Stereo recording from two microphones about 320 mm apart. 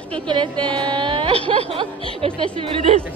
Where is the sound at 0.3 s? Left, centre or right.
Centre.